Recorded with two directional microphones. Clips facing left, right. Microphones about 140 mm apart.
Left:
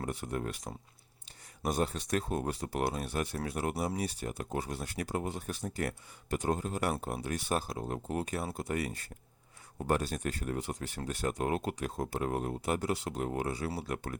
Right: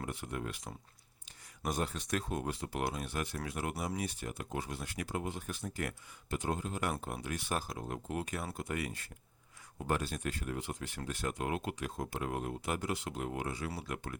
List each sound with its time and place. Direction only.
0.0 s speech: 40° left (ahead or behind)